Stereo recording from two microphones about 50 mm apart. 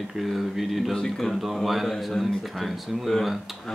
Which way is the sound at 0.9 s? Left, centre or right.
Centre.